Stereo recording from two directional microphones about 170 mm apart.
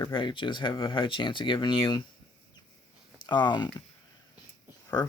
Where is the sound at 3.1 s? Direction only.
25° left (ahead or behind).